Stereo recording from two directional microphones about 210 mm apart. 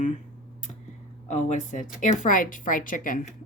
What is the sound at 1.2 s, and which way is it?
A woman's voice, 35° left (ahead or behind).